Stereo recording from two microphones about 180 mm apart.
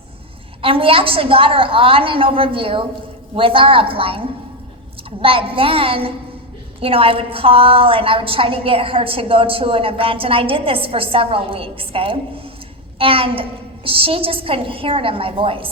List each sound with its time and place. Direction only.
0.6 s a woman's voice: 30° right (ahead or behind)
5.2 s a woman's voice: 30° right (ahead or behind)